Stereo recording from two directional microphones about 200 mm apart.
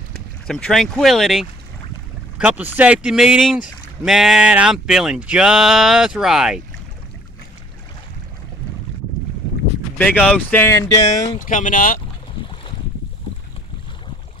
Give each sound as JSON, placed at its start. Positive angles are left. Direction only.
{"t": 0.5, "sound": "speech", "side_deg": 5}
{"t": 9.9, "sound": "speech", "side_deg": 5}
{"t": 11.3, "sound": "speech", "side_deg": 40}